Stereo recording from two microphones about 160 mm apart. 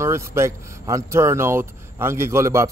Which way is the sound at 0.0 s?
15° right (ahead or behind).